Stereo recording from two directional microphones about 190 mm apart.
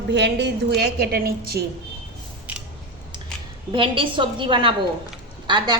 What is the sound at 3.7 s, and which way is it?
A woman's voice, 25° right (ahead or behind).